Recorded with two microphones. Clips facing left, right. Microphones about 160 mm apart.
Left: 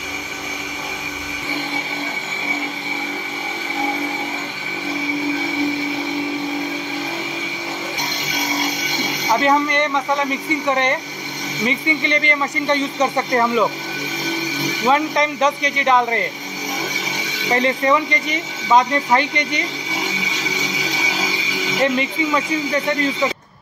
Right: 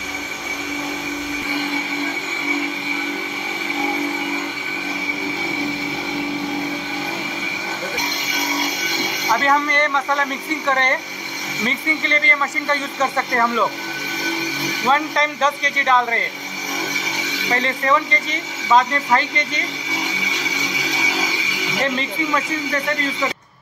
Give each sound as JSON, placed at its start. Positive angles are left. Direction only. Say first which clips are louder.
{"t": 9.3, "sound": "speech", "louder": "left 2 dB", "side_deg": 15}
{"t": 14.9, "sound": "speech", "louder": "left 2 dB", "side_deg": 15}
{"t": 17.5, "sound": "speech", "louder": "left 3 dB", "side_deg": 20}